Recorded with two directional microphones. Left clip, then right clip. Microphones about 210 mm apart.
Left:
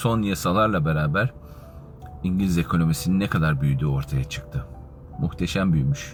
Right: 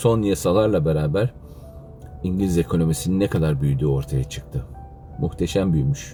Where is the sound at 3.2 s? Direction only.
15° left (ahead or behind).